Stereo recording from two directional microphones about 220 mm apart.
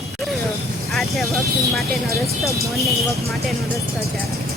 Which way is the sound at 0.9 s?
Centre (ahead or behind).